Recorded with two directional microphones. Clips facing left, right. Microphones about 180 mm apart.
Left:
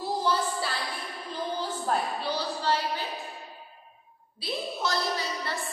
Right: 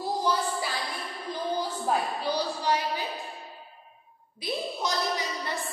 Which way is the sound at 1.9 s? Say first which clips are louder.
Right 1 dB; 15° right (ahead or behind).